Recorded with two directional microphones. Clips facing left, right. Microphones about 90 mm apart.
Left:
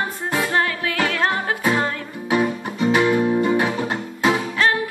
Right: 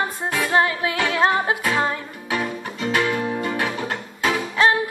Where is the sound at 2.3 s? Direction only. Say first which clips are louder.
Left 5 dB; 10° left (ahead or behind).